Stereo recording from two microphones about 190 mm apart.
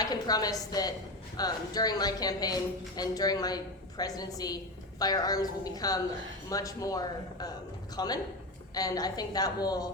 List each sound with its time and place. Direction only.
0.0 s a woman's voice: 20° left (ahead or behind)